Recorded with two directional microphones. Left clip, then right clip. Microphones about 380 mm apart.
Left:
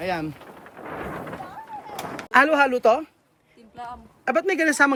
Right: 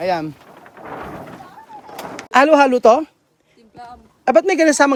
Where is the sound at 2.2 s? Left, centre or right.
Centre.